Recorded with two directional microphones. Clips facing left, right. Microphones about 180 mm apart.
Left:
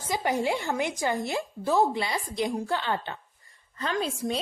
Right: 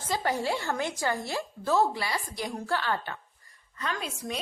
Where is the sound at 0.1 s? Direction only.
15° left (ahead or behind).